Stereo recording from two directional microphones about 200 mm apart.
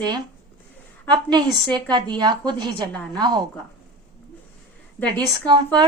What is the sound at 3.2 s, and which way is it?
Speech, 20° right (ahead or behind).